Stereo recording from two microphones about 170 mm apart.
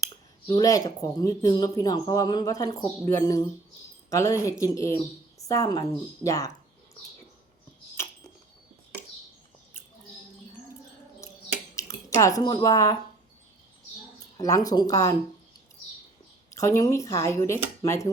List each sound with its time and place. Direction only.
0.0 s speech: 20° left (ahead or behind)
11.7 s speech: 20° left (ahead or behind)
14.3 s speech: 20° left (ahead or behind)
16.6 s speech: 20° left (ahead or behind)